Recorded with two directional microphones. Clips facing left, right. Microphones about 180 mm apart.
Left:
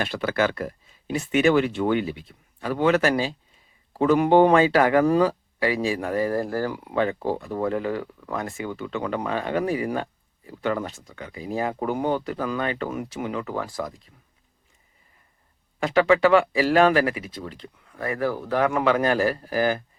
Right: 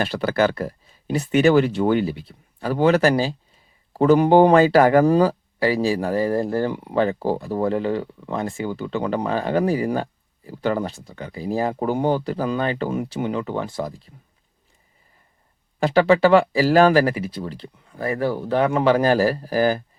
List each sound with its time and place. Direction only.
0.0 s speech: 35° right (ahead or behind)
15.8 s speech: 35° right (ahead or behind)